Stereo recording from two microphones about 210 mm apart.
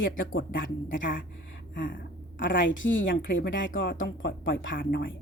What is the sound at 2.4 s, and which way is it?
Speech, 60° left (ahead or behind).